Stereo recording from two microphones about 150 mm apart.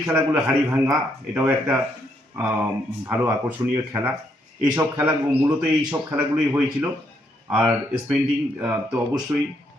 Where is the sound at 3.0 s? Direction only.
10° right (ahead or behind).